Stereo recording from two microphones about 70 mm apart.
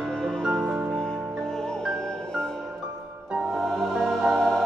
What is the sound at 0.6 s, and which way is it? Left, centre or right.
Music, right.